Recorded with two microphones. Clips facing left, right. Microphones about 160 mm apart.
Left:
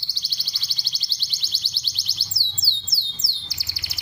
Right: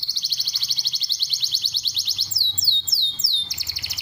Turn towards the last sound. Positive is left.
turn(degrees=-25)  # may be behind; listen again after turning